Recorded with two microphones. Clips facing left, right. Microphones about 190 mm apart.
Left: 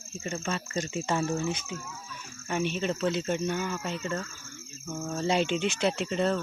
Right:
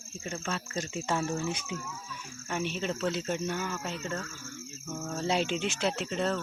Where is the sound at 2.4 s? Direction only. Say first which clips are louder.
Left 3 dB; centre (ahead or behind).